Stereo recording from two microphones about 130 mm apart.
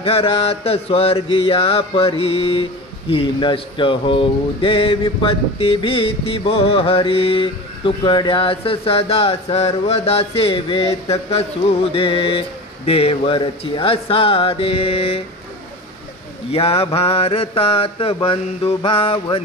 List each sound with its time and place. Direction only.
0.0 s mantra: 45° left (ahead or behind)
16.5 s mantra: 50° left (ahead or behind)